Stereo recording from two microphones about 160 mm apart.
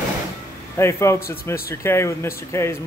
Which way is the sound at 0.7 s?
15° left (ahead or behind).